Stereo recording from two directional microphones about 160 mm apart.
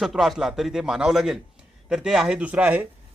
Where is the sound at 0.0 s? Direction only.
Centre (ahead or behind).